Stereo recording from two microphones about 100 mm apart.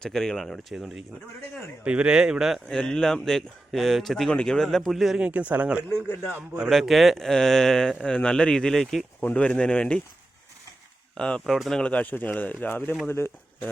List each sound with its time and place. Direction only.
0.0 s speech: 5° left (ahead or behind)
1.8 s a man's voice: 10° right (ahead or behind)
2.6 s speech: 10° left (ahead or behind); by 5.8 s 15° right (ahead or behind)
6.6 s speech: centre (ahead or behind)
9.2 s speech: 15° left (ahead or behind)
11.2 s speech: 10° left (ahead or behind)